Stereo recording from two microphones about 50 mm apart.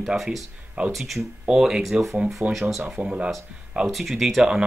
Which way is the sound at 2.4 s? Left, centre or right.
Right.